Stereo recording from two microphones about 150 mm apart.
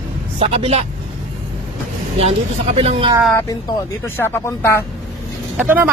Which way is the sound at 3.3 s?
25° left (ahead or behind).